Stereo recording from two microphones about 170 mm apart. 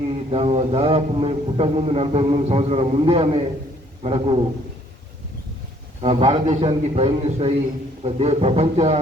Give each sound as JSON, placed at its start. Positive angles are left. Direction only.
{"t": 0.1, "sound": "a man's voice", "side_deg": -35}
{"t": 6.0, "sound": "a man's voice", "side_deg": -35}